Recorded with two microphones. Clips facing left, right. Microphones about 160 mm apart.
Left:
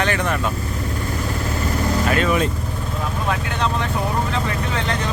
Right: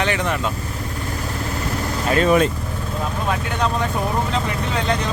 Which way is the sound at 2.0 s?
35° right (ahead or behind).